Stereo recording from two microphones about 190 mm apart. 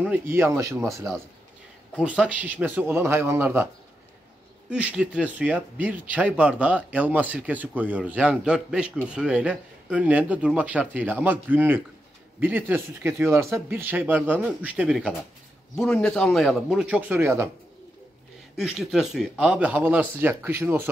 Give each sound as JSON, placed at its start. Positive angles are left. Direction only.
{"t": 0.0, "sound": "speech", "side_deg": -10}
{"t": 4.6, "sound": "a man's voice", "side_deg": -5}
{"t": 18.6, "sound": "speech", "side_deg": 0}